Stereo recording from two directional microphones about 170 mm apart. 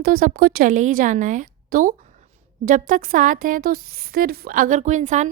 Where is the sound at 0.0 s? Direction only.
60° right (ahead or behind).